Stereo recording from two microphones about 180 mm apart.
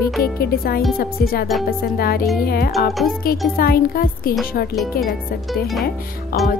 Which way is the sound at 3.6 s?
55° left (ahead or behind).